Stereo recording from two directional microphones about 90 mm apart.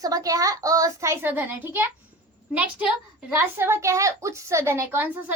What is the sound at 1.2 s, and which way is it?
A woman's voice, 20° right (ahead or behind).